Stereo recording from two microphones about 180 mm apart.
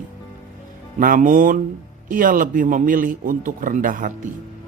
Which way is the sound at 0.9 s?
50° right (ahead or behind).